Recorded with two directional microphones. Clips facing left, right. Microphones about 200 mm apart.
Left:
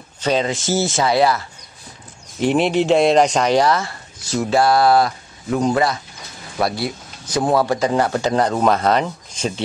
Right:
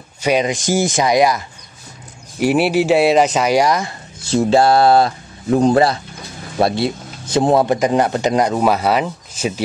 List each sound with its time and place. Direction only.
0.2 s speech: 15° right (ahead or behind)
4.2 s speech: 30° right (ahead or behind); by 9.5 s 5° right (ahead or behind)